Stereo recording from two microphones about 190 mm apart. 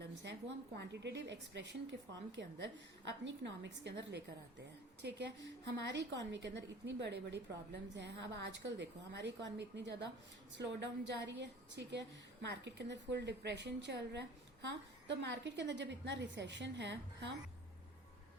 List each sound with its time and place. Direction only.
0.0 s a woman's voice: 65° right (ahead or behind)